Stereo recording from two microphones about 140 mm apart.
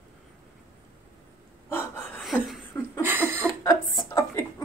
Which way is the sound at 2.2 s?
Centre (ahead or behind).